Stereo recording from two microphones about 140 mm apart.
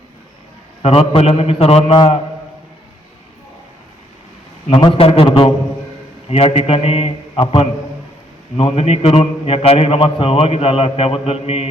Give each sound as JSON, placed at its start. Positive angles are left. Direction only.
{"t": 0.8, "sound": "a man's voice", "side_deg": 45}
{"t": 4.7, "sound": "a man's voice", "side_deg": 40}